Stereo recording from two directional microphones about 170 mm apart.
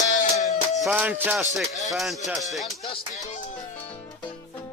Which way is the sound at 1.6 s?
Centre (ahead or behind).